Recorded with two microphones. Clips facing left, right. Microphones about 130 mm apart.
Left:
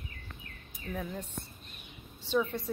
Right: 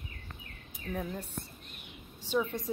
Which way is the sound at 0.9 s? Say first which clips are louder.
Right 1 dB; 10° right (ahead or behind).